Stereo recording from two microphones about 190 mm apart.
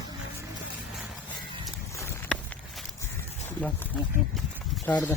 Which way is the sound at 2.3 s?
5° left (ahead or behind).